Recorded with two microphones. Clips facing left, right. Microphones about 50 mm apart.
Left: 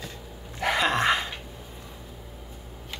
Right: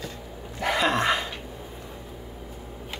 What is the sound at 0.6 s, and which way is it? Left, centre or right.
Dog, left.